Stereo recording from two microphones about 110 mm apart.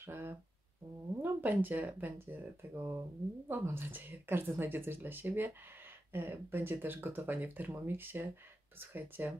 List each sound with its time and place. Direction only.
0.0 s speech: 20° right (ahead or behind)